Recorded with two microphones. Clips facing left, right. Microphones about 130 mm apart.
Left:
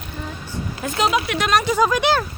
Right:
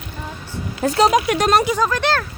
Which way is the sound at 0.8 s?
35° right (ahead or behind).